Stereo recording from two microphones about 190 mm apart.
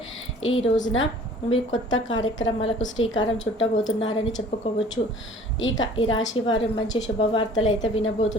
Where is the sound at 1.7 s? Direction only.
90° left.